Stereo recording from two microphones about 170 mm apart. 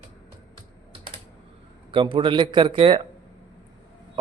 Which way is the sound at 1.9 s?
30° right (ahead or behind).